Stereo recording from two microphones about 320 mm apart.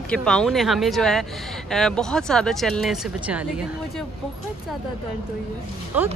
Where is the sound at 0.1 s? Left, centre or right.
Centre.